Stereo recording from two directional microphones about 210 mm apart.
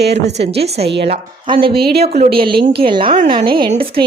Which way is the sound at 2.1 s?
40° right (ahead or behind).